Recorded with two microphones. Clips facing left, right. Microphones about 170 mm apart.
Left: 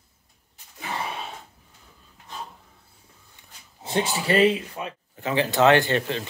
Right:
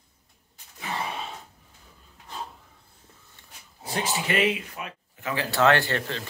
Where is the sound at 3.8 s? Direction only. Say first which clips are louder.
Left 5 dB; 25° left (ahead or behind).